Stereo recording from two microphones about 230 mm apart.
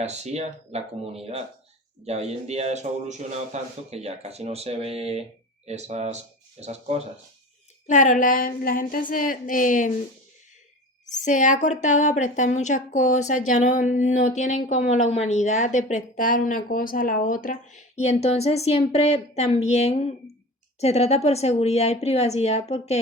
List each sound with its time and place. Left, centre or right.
0.0 s a man's voice: right
7.9 s a woman's voice: left
11.0 s a woman's voice: left